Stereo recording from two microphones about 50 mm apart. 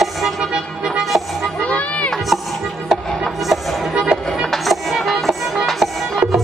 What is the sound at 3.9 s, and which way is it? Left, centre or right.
Music, centre.